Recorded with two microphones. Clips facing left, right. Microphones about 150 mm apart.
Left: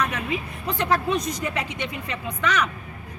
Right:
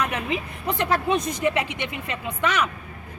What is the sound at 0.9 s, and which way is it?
A man's voice, 25° right (ahead or behind).